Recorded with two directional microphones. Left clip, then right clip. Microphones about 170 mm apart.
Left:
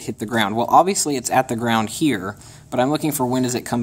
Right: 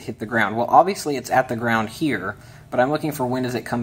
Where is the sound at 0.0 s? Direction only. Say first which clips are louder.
Even; 35° left (ahead or behind).